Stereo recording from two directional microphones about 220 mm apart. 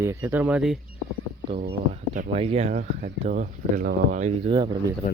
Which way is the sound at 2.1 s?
25° right (ahead or behind).